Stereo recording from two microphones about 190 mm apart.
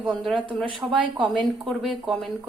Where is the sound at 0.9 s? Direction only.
Centre (ahead or behind).